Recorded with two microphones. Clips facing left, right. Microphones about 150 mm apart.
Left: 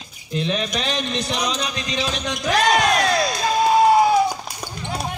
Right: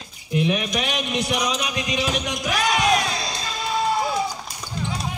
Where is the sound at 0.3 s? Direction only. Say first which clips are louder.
Right 1 dB; 15° right (ahead or behind).